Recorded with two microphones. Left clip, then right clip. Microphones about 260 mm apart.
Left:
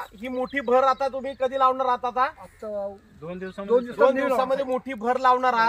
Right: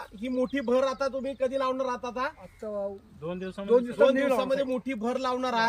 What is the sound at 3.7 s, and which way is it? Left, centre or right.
A man's voice, centre.